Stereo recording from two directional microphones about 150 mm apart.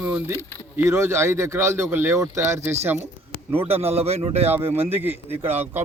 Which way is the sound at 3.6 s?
40° right (ahead or behind).